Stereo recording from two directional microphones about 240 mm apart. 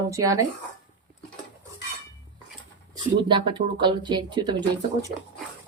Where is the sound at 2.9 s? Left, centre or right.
Centre.